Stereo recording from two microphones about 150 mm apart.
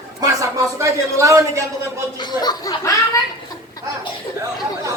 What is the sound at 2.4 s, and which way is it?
Speech, 25° left (ahead or behind).